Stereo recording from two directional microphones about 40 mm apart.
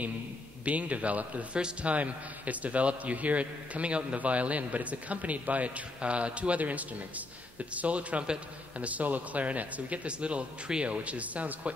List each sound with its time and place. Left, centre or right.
0.7 s a man's voice: right